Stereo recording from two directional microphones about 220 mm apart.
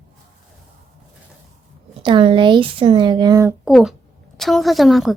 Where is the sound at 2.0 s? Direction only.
25° right (ahead or behind).